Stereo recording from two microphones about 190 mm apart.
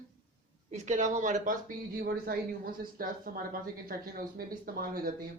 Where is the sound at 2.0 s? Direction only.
55° right (ahead or behind).